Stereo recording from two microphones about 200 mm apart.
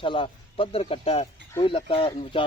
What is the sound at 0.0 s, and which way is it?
Speech, 25° left (ahead or behind).